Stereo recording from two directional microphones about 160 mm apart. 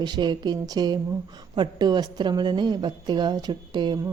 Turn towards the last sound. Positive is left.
turn(degrees=-30)  # may be behind; listen again after turning